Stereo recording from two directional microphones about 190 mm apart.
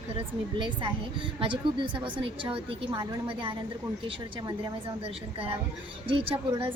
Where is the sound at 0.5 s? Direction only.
25° right (ahead or behind).